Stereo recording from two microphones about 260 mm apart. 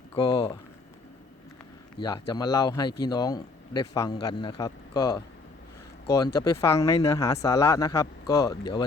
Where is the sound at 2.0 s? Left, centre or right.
Centre.